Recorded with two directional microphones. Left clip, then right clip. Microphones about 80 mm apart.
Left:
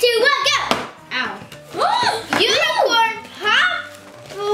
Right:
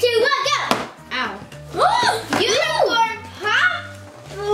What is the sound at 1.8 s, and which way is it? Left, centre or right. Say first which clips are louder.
Music: right 1 dB; centre.